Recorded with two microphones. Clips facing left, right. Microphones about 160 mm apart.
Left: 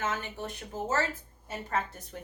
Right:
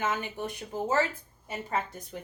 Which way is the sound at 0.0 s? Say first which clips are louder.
Right 3 dB; 15° right (ahead or behind).